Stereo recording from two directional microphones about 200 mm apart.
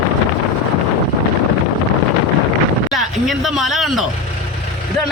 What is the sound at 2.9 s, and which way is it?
Speech, centre (ahead or behind).